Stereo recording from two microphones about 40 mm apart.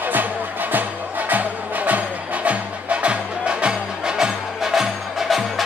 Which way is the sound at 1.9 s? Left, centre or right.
Right.